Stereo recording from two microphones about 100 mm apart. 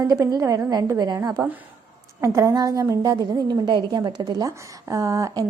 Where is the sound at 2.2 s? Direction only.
30° right (ahead or behind).